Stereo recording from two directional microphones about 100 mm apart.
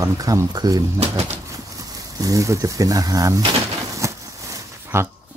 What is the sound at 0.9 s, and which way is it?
Speech, 90° right.